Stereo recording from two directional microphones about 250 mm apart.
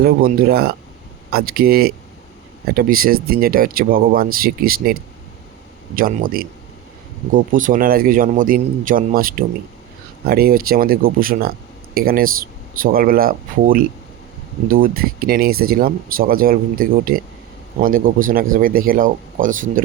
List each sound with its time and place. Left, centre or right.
0.0 s a man's voice: right
6.0 s a man's voice: right